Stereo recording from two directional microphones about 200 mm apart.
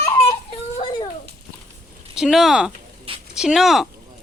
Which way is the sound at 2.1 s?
Centre (ahead or behind).